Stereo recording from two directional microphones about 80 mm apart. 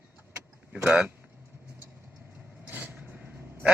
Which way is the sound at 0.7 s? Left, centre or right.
Centre.